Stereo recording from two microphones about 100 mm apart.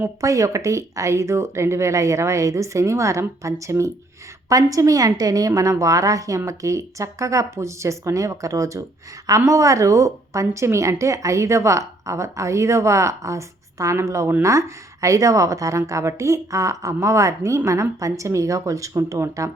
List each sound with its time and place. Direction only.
0.0 s a woman's voice: 30° right (ahead or behind)